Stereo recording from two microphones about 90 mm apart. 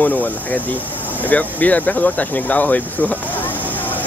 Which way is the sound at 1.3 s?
15° left (ahead or behind).